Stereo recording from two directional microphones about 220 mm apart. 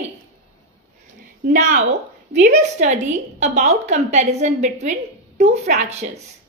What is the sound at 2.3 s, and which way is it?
A woman's voice, 35° right (ahead or behind).